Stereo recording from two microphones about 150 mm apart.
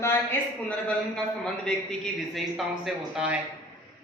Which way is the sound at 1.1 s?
5° left (ahead or behind).